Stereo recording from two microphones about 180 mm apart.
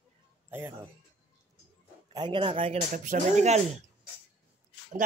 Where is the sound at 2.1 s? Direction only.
25° right (ahead or behind).